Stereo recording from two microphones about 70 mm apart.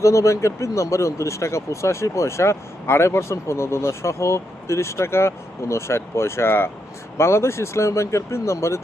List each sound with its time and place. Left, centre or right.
0.0 s speech: left